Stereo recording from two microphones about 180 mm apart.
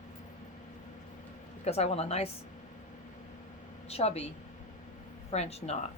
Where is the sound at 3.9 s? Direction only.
35° left (ahead or behind).